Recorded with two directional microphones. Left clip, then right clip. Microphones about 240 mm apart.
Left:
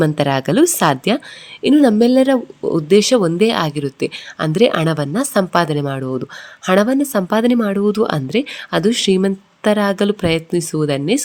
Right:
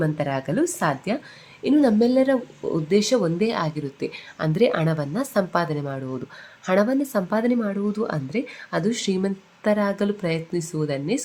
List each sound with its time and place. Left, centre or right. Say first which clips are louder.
0.0 s speech: left 9 dB; left